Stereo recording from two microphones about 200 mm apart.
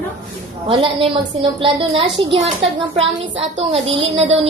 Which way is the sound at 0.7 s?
25° right (ahead or behind).